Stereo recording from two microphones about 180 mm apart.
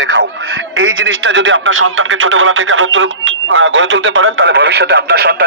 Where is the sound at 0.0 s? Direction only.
90° right.